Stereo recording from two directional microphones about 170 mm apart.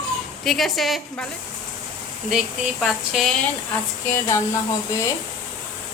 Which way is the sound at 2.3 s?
Centre (ahead or behind).